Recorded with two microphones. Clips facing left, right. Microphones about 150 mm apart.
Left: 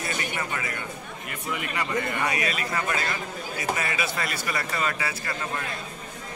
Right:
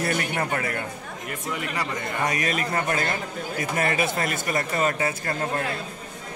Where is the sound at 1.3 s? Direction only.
35° right (ahead or behind).